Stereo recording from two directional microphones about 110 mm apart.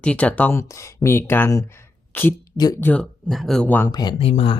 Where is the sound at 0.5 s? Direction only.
25° left (ahead or behind).